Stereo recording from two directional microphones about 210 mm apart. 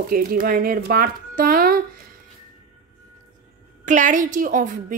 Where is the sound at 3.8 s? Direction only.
35° right (ahead or behind).